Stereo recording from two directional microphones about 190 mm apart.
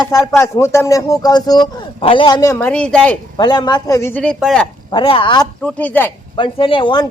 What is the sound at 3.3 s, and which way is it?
A man's voice, 25° left (ahead or behind).